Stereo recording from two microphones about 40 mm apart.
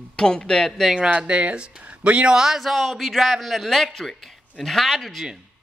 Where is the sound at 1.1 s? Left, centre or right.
Right.